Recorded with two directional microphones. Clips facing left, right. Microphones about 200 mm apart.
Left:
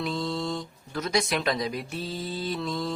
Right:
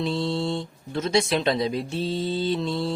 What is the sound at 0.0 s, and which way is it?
Speech, 30° right (ahead or behind).